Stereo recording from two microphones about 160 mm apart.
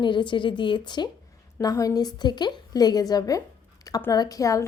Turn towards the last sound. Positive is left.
turn(degrees=20)  # may be behind; listen again after turning